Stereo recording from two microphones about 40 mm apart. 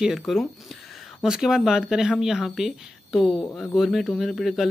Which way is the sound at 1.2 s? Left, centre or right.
Centre.